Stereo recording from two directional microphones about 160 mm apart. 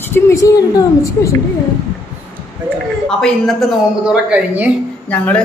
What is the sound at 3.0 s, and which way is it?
Speech, 5° left (ahead or behind).